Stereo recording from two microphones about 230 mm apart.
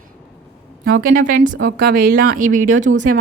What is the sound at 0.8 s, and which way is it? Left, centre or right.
Speech, right.